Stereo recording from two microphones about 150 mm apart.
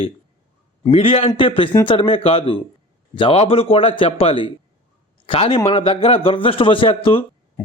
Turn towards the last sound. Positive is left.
turn(degrees=35)  # may be behind; listen again after turning